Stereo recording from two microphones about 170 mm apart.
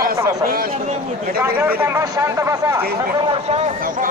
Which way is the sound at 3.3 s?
35° right (ahead or behind).